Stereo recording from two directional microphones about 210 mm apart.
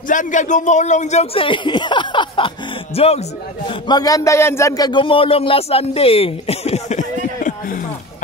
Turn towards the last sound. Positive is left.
turn(degrees=40)  # may be behind; listen again after turning